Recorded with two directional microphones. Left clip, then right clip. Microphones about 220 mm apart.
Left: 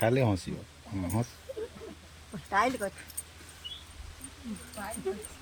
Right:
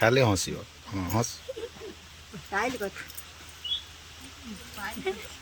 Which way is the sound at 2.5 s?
25° left (ahead or behind).